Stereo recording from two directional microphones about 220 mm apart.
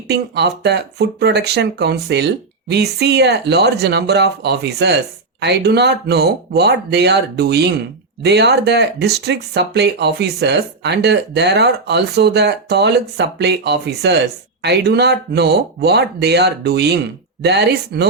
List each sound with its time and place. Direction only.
0.1 s speech: 50° right (ahead or behind)